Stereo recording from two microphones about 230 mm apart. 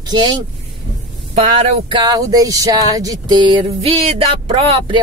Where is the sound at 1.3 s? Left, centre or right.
Right.